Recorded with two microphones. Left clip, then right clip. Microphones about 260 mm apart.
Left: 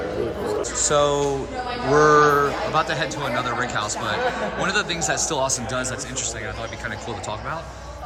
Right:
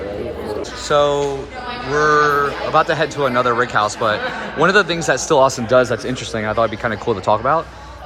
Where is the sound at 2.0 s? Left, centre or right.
Centre.